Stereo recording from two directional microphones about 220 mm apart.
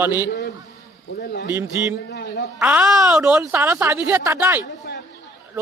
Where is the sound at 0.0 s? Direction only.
10° right (ahead or behind).